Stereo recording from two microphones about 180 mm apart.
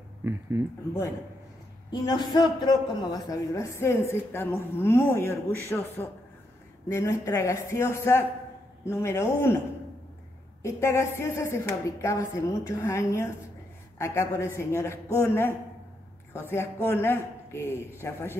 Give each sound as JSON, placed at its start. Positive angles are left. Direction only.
{"t": 1.9, "sound": "a man's voice", "side_deg": 25}
{"t": 10.6, "sound": "a man's voice", "side_deg": 15}